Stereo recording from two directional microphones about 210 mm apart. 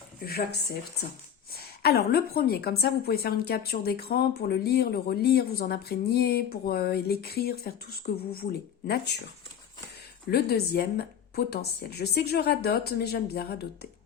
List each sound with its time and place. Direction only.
0.3 s a woman's voice: 50° left (ahead or behind)
10.2 s a woman's voice: 50° left (ahead or behind)